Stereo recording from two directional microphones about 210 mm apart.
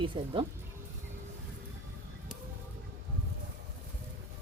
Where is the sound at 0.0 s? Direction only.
25° right (ahead or behind).